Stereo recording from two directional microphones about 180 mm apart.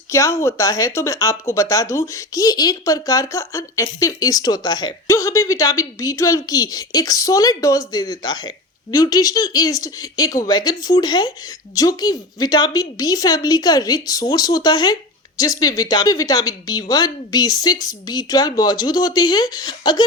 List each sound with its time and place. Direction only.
0.1 s speech: 15° left (ahead or behind)